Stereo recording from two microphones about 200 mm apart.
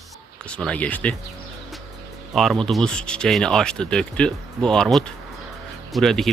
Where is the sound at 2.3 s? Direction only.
Centre (ahead or behind).